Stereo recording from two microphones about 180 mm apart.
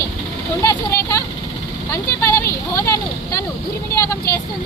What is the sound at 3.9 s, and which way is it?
Speech, 15° left (ahead or behind).